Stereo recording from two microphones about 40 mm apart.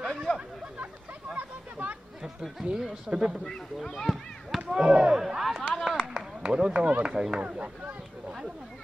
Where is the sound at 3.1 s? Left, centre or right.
Centre.